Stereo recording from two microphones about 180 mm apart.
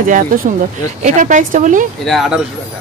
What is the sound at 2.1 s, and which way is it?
Speech, centre (ahead or behind).